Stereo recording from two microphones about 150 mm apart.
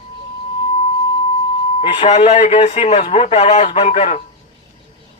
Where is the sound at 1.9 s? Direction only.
45° left (ahead or behind).